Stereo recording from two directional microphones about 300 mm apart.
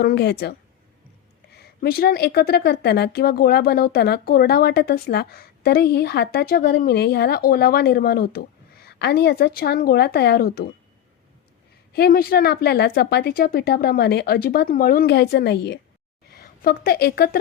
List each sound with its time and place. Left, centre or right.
0.0 s speech: left
1.5 s speech: left
11.9 s a woman's voice: left